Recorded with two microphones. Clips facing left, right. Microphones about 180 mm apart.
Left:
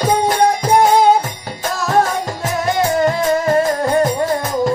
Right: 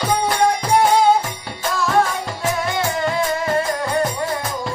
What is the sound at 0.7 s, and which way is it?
Music, 45° left (ahead or behind).